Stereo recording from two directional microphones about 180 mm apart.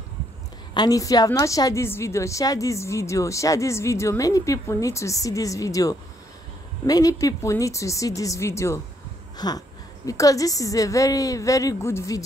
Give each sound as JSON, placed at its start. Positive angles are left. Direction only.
{"t": 0.7, "sound": "a woman's voice", "side_deg": 20}